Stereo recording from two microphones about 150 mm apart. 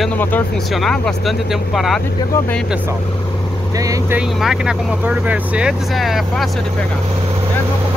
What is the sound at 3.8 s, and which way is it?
Speech, 20° right (ahead or behind).